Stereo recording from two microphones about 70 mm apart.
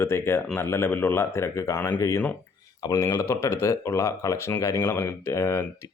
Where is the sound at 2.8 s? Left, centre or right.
Left.